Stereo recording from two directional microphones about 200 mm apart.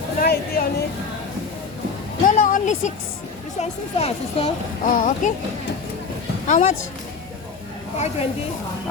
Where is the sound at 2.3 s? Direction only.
40° left (ahead or behind).